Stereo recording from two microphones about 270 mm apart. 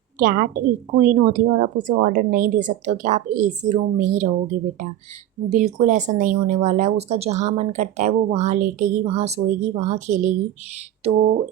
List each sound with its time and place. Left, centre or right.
0.2 s speech: right